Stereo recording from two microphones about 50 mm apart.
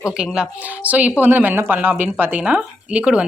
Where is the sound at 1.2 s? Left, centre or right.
Right.